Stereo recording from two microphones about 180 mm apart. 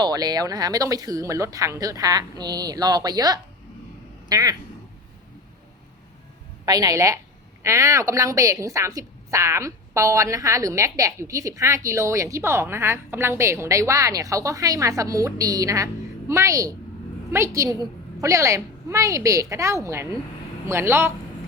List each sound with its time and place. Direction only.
0.0 s speech: 20° right (ahead or behind)
6.7 s a woman's voice: 20° right (ahead or behind)